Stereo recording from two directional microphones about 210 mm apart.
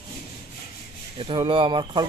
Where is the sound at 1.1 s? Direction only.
25° right (ahead or behind).